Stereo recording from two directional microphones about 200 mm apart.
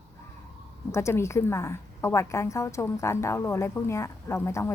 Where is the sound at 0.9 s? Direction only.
15° left (ahead or behind).